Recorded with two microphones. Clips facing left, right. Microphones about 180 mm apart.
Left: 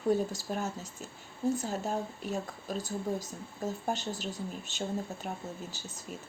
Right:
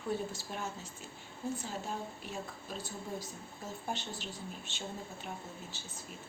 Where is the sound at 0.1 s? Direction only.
40° left (ahead or behind).